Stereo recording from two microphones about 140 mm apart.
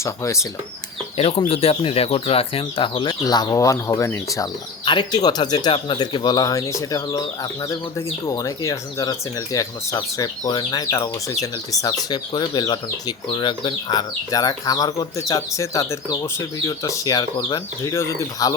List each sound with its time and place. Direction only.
0.0 s speech: 20° left (ahead or behind)
1.1 s speech: 45° left (ahead or behind); by 4.4 s 20° left (ahead or behind)
4.9 s speech: 30° left (ahead or behind)